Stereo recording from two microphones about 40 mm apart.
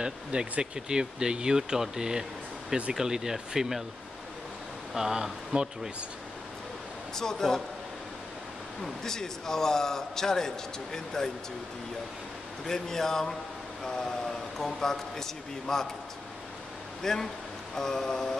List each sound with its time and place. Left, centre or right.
0.0 s speech: right
4.9 s speech: centre
7.2 s a man's voice: centre
8.8 s a man's voice: centre
12.6 s a man's voice: centre
17.0 s a man's voice: centre